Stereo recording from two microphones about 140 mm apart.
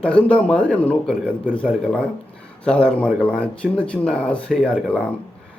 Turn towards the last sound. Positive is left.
turn(degrees=5)  # may be behind; listen again after turning